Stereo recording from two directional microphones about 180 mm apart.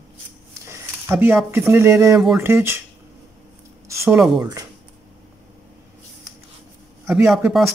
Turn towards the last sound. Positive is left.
turn(degrees=0)  # may be behind; listen again after turning